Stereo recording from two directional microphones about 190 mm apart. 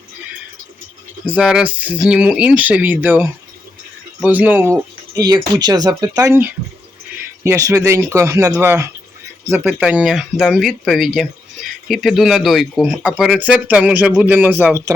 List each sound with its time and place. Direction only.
1.2 s speech: 5° right (ahead or behind)